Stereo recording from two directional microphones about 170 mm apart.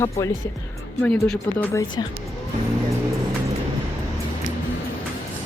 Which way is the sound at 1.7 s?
20° left (ahead or behind).